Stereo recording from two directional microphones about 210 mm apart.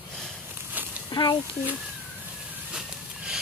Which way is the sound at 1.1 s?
20° left (ahead or behind).